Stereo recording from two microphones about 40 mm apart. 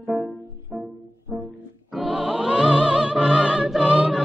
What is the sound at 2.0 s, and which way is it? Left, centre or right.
Music, centre.